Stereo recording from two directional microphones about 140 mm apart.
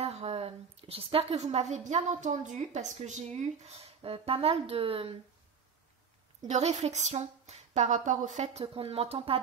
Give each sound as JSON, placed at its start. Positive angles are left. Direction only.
{"t": 0.0, "sound": "a woman's voice", "side_deg": -50}
{"t": 3.3, "sound": "a woman's voice", "side_deg": -45}
{"t": 6.4, "sound": "a woman's voice", "side_deg": -55}
{"t": 8.7, "sound": "a woman's voice", "side_deg": -45}